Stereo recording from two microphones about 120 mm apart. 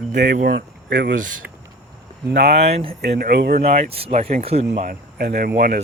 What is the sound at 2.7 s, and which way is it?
Speech, 50° right (ahead or behind).